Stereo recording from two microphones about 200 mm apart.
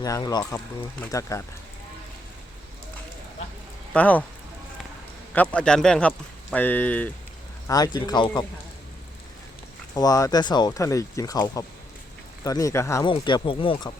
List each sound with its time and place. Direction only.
0.0 s speech: 20° left (ahead or behind)
3.9 s speech: 5° left (ahead or behind)
5.3 s speech: 10° left (ahead or behind)
7.7 s speech: 20° left (ahead or behind)
9.9 s speech: 20° left (ahead or behind)